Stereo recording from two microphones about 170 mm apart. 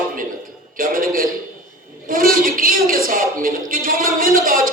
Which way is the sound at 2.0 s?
55° right (ahead or behind).